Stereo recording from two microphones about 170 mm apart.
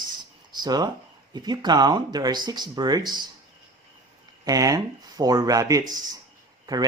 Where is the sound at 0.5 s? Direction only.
25° right (ahead or behind).